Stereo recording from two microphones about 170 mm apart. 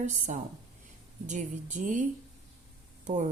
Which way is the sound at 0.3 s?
45° right (ahead or behind).